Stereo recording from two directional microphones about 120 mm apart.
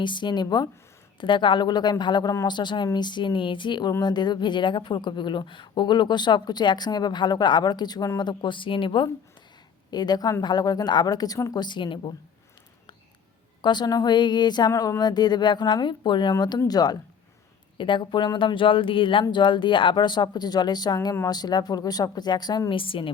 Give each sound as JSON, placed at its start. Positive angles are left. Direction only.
{"t": 0.0, "sound": "speech", "side_deg": 40}
{"t": 13.6, "sound": "speech", "side_deg": 40}